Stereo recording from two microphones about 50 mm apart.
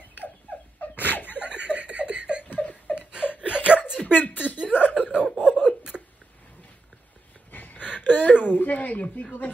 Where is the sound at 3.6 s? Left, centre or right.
Right.